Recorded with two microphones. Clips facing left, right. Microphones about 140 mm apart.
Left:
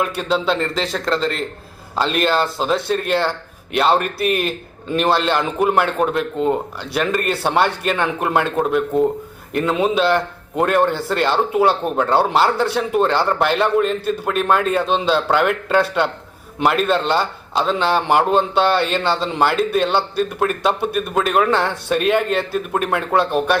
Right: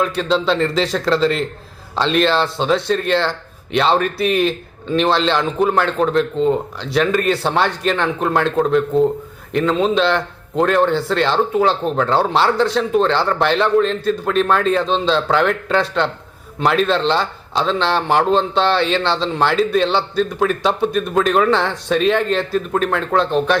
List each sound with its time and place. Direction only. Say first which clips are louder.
0.0 s a man's voice: right 2 dB; 5° left (ahead or behind)